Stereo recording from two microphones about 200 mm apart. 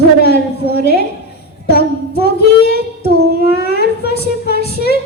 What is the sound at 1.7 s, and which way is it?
Child singing, 55° left (ahead or behind).